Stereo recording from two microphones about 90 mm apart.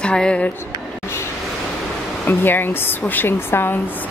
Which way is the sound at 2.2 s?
25° left (ahead or behind).